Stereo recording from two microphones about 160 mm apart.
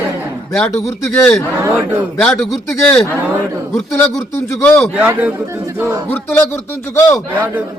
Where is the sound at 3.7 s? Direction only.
Centre (ahead or behind).